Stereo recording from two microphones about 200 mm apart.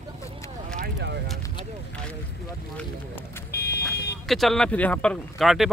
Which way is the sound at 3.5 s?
50° left (ahead or behind).